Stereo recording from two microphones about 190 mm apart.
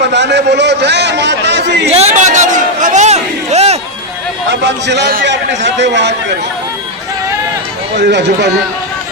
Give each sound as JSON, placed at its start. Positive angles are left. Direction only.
{"t": 0.0, "sound": "a man's voice", "side_deg": -65}
{"t": 1.9, "sound": "a sound", "side_deg": -35}
{"t": 4.4, "sound": "a man's voice", "side_deg": -65}
{"t": 7.9, "sound": "speech", "side_deg": -65}